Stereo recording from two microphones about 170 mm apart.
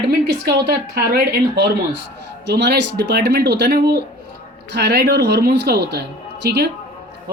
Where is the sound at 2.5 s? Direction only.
80° right.